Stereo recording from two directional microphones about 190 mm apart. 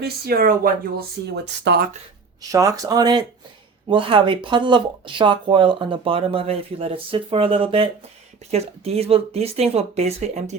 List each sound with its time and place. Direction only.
0.0 s speech: 50° right (ahead or behind)
2.5 s speech: 15° right (ahead or behind); by 10.5 s 35° right (ahead or behind)